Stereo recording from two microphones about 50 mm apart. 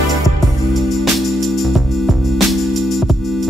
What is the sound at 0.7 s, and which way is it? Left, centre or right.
Music, centre.